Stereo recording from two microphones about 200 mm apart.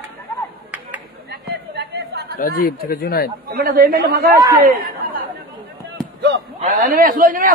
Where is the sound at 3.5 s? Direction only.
45° right (ahead or behind).